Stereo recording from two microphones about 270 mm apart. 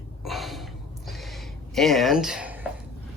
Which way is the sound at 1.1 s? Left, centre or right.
Centre.